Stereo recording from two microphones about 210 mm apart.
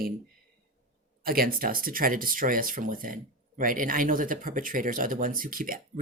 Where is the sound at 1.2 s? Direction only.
45° right (ahead or behind).